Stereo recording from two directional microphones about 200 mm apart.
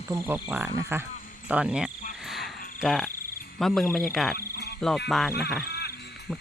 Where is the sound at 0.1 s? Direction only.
20° right (ahead or behind).